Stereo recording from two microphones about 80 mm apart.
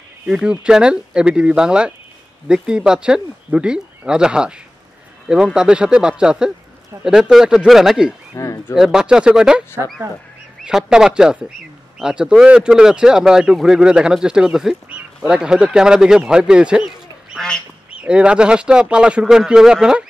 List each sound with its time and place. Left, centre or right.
0.3 s speech: centre
8.4 s speech: left
8.7 s speech: centre
10.6 s speech: centre
17.9 s speech: centre